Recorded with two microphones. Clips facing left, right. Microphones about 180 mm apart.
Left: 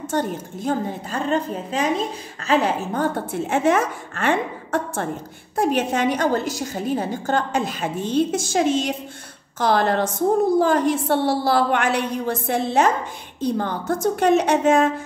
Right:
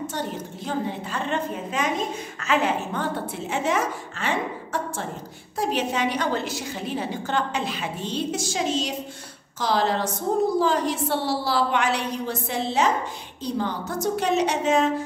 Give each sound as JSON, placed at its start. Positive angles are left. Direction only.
{"t": 0.1, "sound": "a woman's voice", "side_deg": 50}